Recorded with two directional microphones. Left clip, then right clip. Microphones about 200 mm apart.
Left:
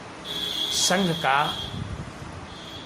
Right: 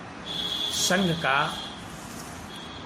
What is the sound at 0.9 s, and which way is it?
Speech, 15° left (ahead or behind).